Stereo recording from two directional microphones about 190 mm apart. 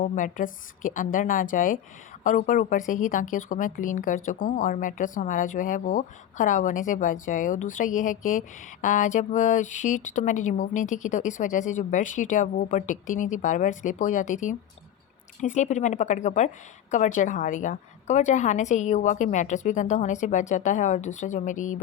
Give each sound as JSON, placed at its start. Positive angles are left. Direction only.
{"t": 0.0, "sound": "a woman's voice", "side_deg": 45}